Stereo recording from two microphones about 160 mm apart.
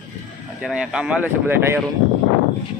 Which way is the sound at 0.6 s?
5° right (ahead or behind).